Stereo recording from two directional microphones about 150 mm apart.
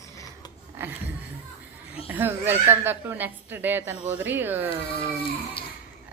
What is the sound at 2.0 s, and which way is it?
A woman's voice, 15° right (ahead or behind).